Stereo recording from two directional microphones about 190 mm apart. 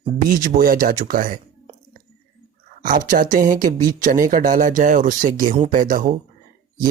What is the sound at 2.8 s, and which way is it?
Speech, 45° right (ahead or behind).